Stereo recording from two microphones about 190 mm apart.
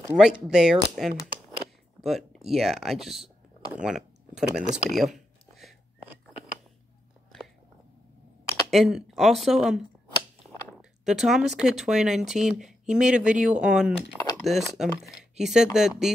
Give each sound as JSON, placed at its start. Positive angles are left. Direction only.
{"t": 0.2, "sound": "speech", "side_deg": -5}
{"t": 4.9, "sound": "a sound", "side_deg": 0}
{"t": 8.6, "sound": "speech", "side_deg": 0}